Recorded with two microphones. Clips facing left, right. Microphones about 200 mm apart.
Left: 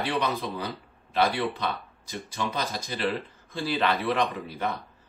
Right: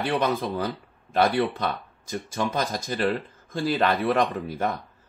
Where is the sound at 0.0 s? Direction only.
50° right (ahead or behind).